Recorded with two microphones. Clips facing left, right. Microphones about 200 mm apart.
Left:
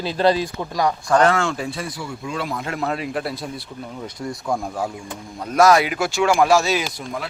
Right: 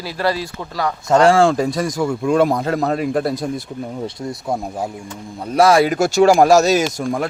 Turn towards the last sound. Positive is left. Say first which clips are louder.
# right 8 dB
turn(degrees=-50)  # may be behind; listen again after turning